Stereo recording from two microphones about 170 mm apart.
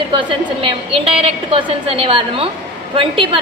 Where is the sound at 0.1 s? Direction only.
30° right (ahead or behind).